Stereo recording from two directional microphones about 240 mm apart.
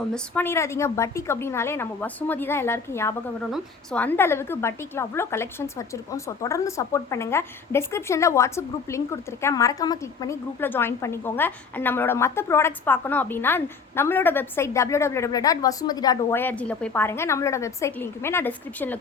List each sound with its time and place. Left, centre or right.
0.1 s a woman's voice: centre